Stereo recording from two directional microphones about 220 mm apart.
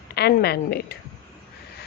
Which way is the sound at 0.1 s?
45° left (ahead or behind).